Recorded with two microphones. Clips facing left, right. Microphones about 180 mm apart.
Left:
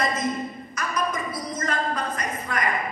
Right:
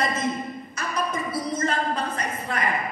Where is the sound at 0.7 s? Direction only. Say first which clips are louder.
Even; 30° right (ahead or behind).